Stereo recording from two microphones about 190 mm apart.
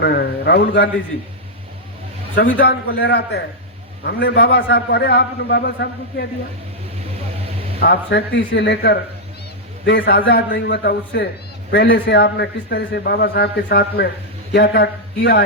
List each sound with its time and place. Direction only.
0.0 s a man's voice: 60° left (ahead or behind)
2.3 s a man's voice: 60° left (ahead or behind)
7.8 s a man's voice: 60° left (ahead or behind)